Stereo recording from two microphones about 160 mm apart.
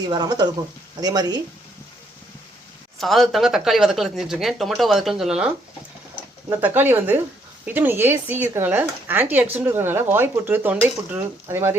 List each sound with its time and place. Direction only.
0.0 s speech: 25° right (ahead or behind)
3.0 s speech: centre (ahead or behind)
6.5 s speech: 10° right (ahead or behind)